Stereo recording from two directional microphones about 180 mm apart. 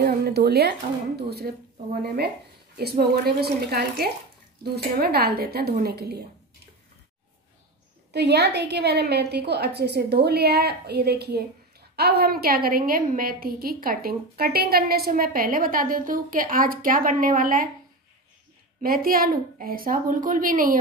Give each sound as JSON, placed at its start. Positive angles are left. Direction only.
{"t": 0.2, "sound": "speech", "side_deg": -65}
{"t": 1.5, "sound": "a woman's voice", "side_deg": -50}
{"t": 2.8, "sound": "a woman's voice", "side_deg": -60}
{"t": 8.1, "sound": "a woman's voice", "side_deg": -70}
{"t": 18.8, "sound": "a woman's voice", "side_deg": -55}